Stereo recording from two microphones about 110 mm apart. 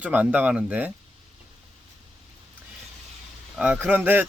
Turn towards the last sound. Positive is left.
turn(degrees=-15)  # may be behind; listen again after turning